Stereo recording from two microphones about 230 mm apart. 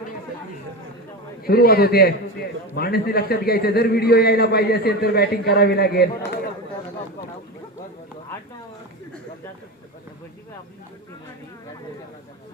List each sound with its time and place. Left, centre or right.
1.5 s a man's voice: left